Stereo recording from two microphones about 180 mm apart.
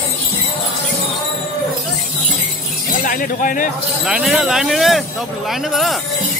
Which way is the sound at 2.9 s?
50° left (ahead or behind).